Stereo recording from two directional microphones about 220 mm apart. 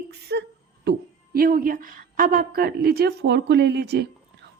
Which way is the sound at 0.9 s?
40° right (ahead or behind).